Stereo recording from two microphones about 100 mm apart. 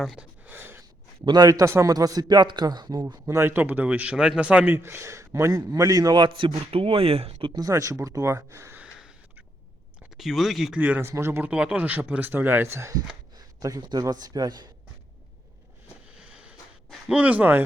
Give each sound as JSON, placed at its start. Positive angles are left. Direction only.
{"t": 0.0, "sound": "speech", "side_deg": 0}
{"t": 0.4, "sound": "a sound", "side_deg": -20}
{"t": 1.2, "sound": "speech", "side_deg": -40}
{"t": 3.2, "sound": "a man's voice", "side_deg": -25}
{"t": 7.5, "sound": "speech", "side_deg": -35}
{"t": 8.8, "sound": "a sound", "side_deg": -5}
{"t": 10.2, "sound": "speech", "side_deg": 0}
{"t": 10.8, "sound": "a man's voice", "side_deg": -15}
{"t": 13.3, "sound": "a man's voice", "side_deg": -40}
{"t": 16.1, "sound": "a sound", "side_deg": -10}
{"t": 17.1, "sound": "speech", "side_deg": -15}